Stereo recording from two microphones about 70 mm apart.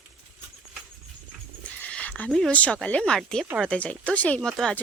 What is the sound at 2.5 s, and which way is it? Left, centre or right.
Speech, left.